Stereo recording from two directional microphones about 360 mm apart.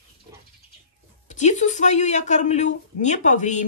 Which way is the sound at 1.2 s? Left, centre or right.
Centre.